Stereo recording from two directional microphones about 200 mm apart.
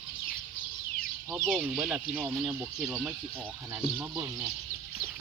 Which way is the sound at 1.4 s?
5° right (ahead or behind).